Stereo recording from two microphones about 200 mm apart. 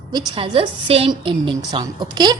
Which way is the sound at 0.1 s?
25° right (ahead or behind).